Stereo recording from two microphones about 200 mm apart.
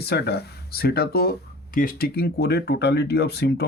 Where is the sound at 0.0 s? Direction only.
55° left (ahead or behind).